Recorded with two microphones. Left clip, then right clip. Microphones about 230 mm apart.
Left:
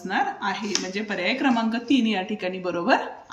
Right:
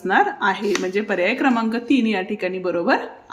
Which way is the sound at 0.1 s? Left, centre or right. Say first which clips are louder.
Right 7 dB; right.